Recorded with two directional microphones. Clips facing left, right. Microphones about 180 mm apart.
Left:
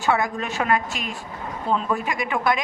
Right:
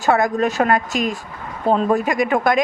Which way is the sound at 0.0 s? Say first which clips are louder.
Right 6 dB; 45° right (ahead or behind).